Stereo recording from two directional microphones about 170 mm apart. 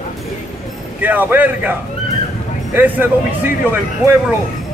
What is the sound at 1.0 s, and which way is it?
Speech, 10° right (ahead or behind).